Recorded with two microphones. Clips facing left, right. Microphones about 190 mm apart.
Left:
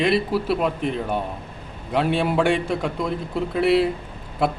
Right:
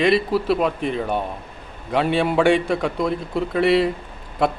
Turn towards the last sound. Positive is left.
turn(degrees=5)  # may be behind; listen again after turning